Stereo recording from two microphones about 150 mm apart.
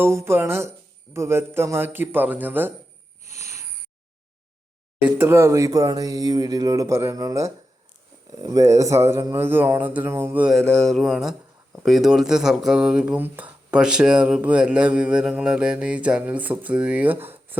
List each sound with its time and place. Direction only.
0.0 s speech: 15° right (ahead or behind)
3.3 s a sound: 20° right (ahead or behind)
5.0 s speech: 15° right (ahead or behind)
10.5 s speech: 5° left (ahead or behind); by 17.6 s 15° right (ahead or behind)